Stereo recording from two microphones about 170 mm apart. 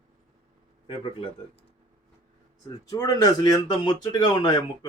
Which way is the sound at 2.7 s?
20° left (ahead or behind).